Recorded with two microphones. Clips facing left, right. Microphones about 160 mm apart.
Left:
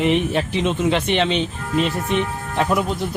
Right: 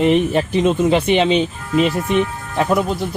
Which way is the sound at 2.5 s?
5° right (ahead or behind).